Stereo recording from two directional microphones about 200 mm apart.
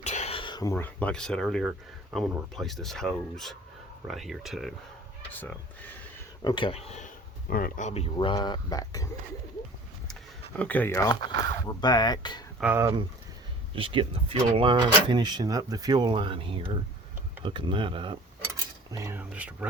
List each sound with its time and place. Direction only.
0.0 s speech: 35° left (ahead or behind); by 4.7 s centre (ahead or behind)
6.4 s speech: 25° left (ahead or behind)
10.6 s speech: 10° left (ahead or behind)
12.5 s speech: 10° right (ahead or behind)
13.7 s speech: 25° right (ahead or behind)
18.9 s speech: 15° right (ahead or behind)